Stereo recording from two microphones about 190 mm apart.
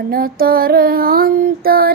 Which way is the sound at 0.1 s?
50° right (ahead or behind).